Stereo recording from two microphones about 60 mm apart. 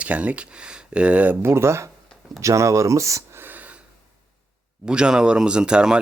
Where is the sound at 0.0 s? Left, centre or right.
Right.